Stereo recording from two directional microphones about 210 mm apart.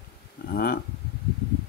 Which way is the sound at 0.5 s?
45° left (ahead or behind).